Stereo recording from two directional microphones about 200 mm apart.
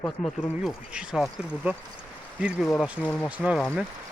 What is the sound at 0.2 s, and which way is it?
Speech, 45° left (ahead or behind).